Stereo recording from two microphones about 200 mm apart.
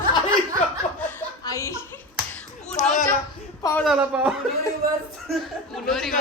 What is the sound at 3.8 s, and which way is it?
Speech, 5° right (ahead or behind).